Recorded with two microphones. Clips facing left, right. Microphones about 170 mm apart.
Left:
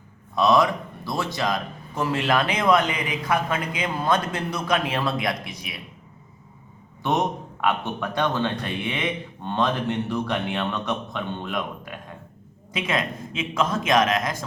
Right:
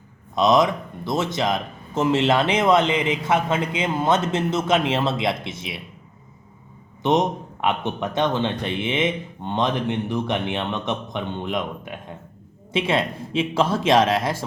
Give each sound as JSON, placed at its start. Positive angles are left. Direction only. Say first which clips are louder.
{"t": 0.3, "sound": "speech", "louder": "right 2 dB", "side_deg": -20}
{"t": 7.0, "sound": "speech", "louder": "right 4 dB", "side_deg": -20}